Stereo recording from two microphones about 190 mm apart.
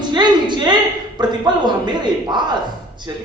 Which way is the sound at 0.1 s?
20° right (ahead or behind).